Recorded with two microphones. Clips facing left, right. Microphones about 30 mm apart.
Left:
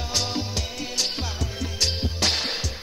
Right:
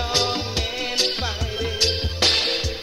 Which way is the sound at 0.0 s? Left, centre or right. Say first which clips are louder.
Right 5 dB; right.